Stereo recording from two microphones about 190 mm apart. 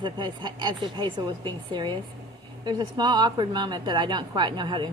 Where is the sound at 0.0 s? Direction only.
25° right (ahead or behind).